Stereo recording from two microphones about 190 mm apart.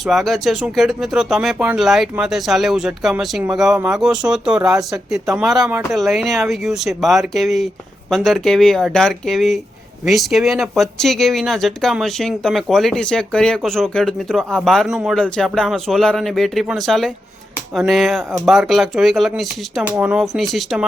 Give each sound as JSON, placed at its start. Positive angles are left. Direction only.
{"t": 0.0, "sound": "speech", "side_deg": 0}